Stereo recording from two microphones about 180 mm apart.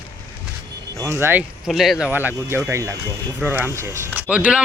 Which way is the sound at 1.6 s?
Centre (ahead or behind).